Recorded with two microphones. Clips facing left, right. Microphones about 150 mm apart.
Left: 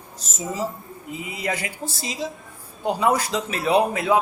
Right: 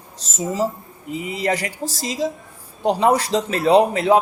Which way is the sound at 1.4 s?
35° right (ahead or behind).